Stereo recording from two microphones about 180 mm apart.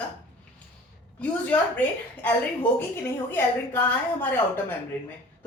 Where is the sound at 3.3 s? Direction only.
10° left (ahead or behind).